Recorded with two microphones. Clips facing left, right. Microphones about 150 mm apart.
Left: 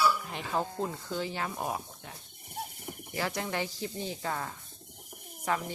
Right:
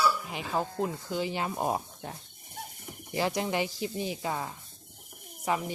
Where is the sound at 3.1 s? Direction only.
20° right (ahead or behind).